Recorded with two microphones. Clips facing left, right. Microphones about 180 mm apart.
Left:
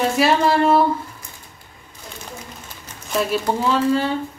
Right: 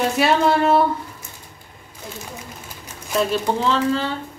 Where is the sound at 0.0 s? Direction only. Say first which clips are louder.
Even; centre (ahead or behind).